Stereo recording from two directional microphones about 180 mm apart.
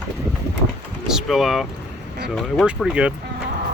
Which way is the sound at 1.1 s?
Centre (ahead or behind).